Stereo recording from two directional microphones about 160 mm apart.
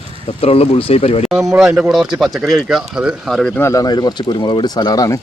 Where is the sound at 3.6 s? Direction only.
20° left (ahead or behind).